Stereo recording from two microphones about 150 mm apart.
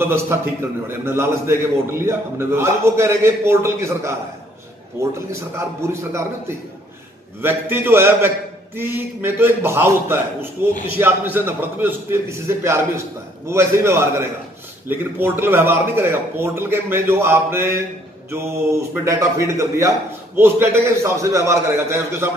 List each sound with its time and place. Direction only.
0.0 s a man's voice: 15° right (ahead or behind)
7.4 s a man's voice: 15° right (ahead or behind)